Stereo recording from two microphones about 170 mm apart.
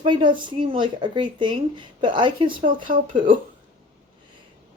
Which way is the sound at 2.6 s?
50° right (ahead or behind).